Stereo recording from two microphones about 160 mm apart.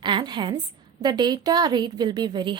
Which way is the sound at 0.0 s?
30° right (ahead or behind).